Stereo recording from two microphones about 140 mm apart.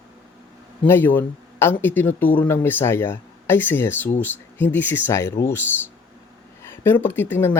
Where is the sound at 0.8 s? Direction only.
15° left (ahead or behind).